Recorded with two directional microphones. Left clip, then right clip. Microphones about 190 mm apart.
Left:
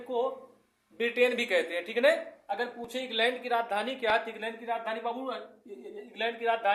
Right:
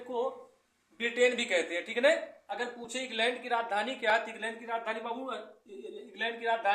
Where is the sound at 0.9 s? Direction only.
25° left (ahead or behind).